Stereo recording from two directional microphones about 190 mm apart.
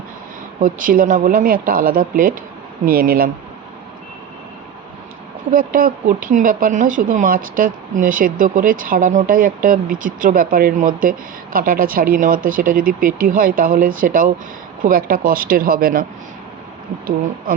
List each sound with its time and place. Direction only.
0.6 s speech: 45° right (ahead or behind)
5.5 s speech: 45° right (ahead or behind)